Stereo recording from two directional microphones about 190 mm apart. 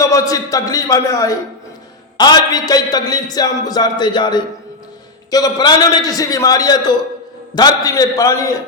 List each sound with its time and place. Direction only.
0.0 s a man's voice: 20° left (ahead or behind)